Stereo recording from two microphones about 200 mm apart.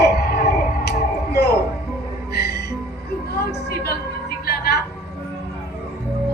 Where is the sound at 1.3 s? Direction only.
55° left (ahead or behind).